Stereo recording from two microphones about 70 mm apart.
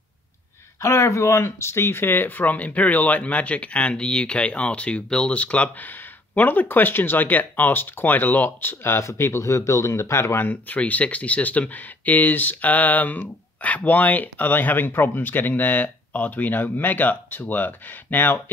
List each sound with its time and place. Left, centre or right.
0.7 s speech: left